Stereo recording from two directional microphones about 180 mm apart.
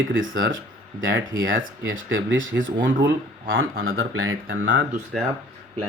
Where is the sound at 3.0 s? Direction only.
85° right.